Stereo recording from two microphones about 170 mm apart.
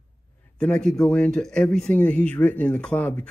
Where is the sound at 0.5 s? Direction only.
5° left (ahead or behind).